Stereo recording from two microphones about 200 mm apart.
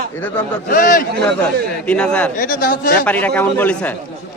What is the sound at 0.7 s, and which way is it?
Speech, 45° left (ahead or behind).